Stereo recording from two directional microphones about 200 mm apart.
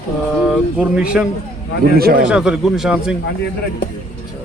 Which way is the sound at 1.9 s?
50° right (ahead or behind).